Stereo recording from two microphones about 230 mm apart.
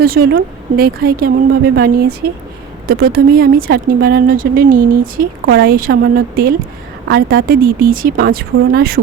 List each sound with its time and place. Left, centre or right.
0.0 s speech: right